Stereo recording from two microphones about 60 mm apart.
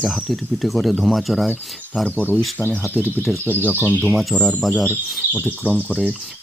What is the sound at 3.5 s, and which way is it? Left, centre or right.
Speech, left.